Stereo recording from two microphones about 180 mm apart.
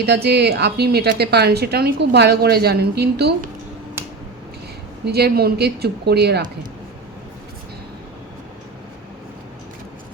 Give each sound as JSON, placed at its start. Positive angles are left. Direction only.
{"t": 0.0, "sound": "a woman's voice", "side_deg": -65}
{"t": 5.0, "sound": "a woman's voice", "side_deg": -60}